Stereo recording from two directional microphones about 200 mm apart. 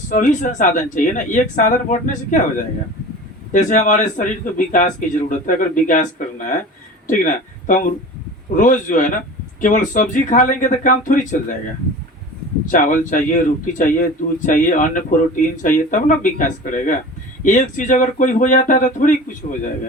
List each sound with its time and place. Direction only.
0.1 s a man's voice: 40° left (ahead or behind)
3.5 s a man's voice: 40° left (ahead or behind)
7.7 s a man's voice: 40° left (ahead or behind)
12.7 s a man's voice: 40° left (ahead or behind)